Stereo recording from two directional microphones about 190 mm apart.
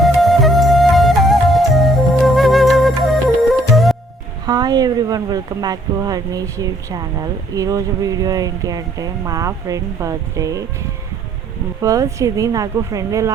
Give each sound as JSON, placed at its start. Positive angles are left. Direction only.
{"t": 0.0, "sound": "music", "side_deg": 0}
{"t": 4.4, "sound": "speech", "side_deg": -20}
{"t": 11.8, "sound": "speech", "side_deg": -15}